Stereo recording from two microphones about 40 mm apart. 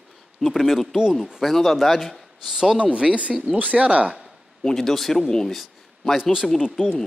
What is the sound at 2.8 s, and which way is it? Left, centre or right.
Speech, right.